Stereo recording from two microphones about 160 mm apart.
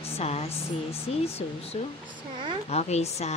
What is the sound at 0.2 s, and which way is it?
Speech, 40° left (ahead or behind).